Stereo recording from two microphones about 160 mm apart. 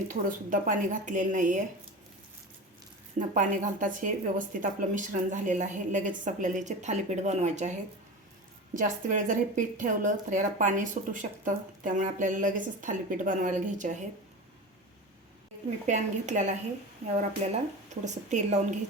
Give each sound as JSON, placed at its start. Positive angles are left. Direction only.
{"t": 0.1, "sound": "a woman's voice", "side_deg": -55}
{"t": 3.2, "sound": "a woman's voice", "side_deg": -55}
{"t": 15.9, "sound": "a woman's voice", "side_deg": -50}